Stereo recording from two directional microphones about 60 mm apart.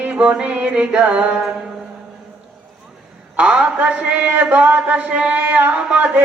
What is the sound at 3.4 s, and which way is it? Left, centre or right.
Mantra, centre.